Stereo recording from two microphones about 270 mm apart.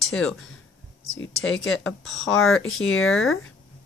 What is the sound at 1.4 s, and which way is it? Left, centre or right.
Speech, left.